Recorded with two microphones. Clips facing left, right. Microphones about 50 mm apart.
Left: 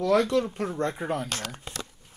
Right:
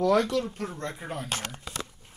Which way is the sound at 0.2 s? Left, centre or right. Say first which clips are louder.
Left 3 dB; left.